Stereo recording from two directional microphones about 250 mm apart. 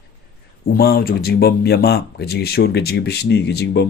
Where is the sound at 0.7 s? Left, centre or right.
Left.